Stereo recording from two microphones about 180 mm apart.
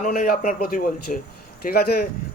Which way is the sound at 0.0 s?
50° left (ahead or behind).